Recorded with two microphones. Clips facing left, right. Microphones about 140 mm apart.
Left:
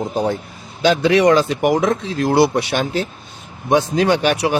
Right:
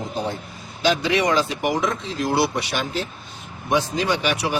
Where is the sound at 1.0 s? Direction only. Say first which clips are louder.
Left 7 dB; 55° left (ahead or behind).